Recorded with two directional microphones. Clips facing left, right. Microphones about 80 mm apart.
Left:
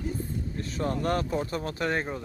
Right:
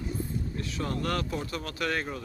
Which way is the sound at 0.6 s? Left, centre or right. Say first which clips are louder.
Left 4 dB; left.